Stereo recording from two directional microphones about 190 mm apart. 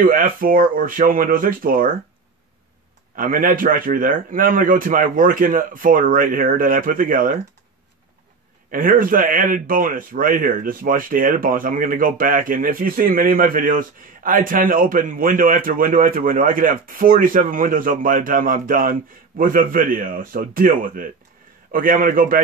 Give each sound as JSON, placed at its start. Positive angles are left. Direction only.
{"t": 0.0, "sound": "a man's voice", "side_deg": -50}
{"t": 3.2, "sound": "a man's voice", "side_deg": -45}
{"t": 8.6, "sound": "a man's voice", "side_deg": -45}